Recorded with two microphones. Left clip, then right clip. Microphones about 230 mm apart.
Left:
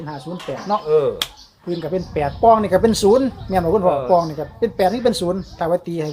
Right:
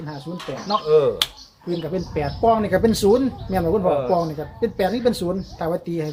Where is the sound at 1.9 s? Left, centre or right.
Left.